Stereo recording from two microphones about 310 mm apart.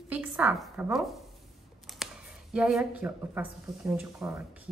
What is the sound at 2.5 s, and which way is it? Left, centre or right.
Speech, centre.